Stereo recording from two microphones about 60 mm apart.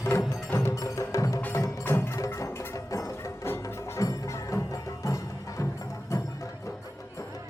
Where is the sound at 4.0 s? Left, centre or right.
Left.